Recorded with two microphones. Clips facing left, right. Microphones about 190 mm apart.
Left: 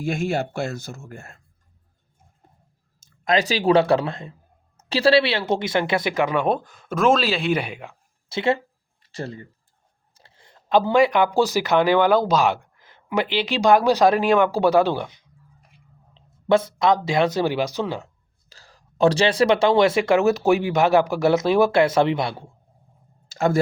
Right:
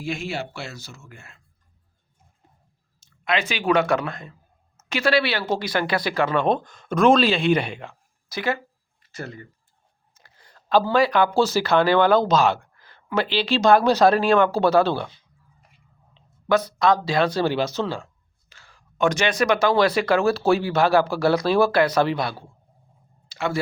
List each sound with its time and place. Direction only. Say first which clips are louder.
0.0 s speech: left 5 dB; 45° left (ahead or behind)
3.1 s speech: left 4 dB; 40° left (ahead or behind); by 7.9 s 10° left (ahead or behind)
8.3 s a sound: left 4 dB; 25° left (ahead or behind)
10.2 s speech: left 2 dB; 25° left (ahead or behind)
16.1 s speech: left 2 dB; 25° left (ahead or behind)
18.4 s speech: left 3 dB; 35° left (ahead or behind)
23.3 s speech: left 5 dB; 45° left (ahead or behind)